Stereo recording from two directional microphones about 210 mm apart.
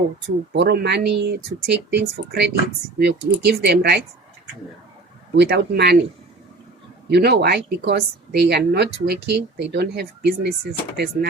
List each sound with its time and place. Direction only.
0.5 s speech: 50° right (ahead or behind)
5.4 s speech: 50° right (ahead or behind)
7.1 s speech: 50° right (ahead or behind)